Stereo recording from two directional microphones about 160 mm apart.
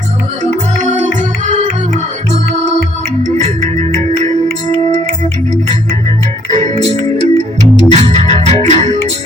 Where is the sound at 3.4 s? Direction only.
50° right (ahead or behind).